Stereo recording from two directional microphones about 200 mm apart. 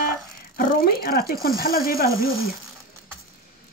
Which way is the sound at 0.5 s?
50° left (ahead or behind).